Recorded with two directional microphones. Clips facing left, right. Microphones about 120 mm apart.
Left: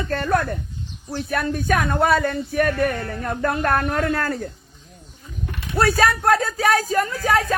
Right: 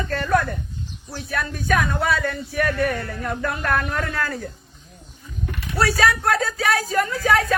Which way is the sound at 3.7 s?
30° left (ahead or behind).